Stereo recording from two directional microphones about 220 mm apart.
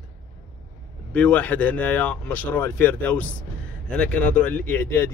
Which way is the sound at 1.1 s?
5° left (ahead or behind).